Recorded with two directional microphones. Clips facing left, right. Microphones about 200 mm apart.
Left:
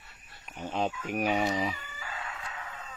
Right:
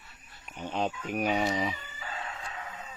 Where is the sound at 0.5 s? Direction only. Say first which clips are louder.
Even; 5° left (ahead or behind).